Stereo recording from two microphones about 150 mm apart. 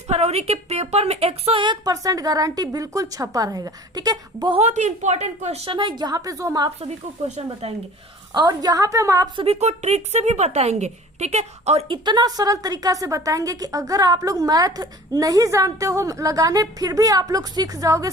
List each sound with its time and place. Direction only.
0.1 s a woman's voice: 45° right (ahead or behind); by 4.5 s 25° right (ahead or behind)
4.5 s a woman's voice: 50° right (ahead or behind); by 6.7 s 25° right (ahead or behind)
6.8 s a woman's voice: 45° right (ahead or behind)
8.3 s a woman's voice: 30° right (ahead or behind)
9.4 s a woman's voice: 45° right (ahead or behind)
12.0 s a woman's voice: 25° right (ahead or behind)